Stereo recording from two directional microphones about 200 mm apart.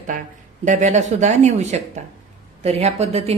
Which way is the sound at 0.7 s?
35° right (ahead or behind).